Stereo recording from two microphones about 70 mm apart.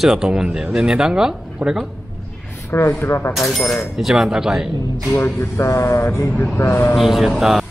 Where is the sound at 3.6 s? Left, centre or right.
Left.